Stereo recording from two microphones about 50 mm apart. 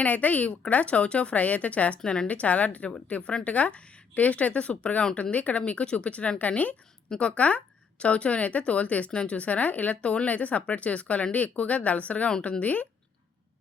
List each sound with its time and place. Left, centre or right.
0.0 s speech: left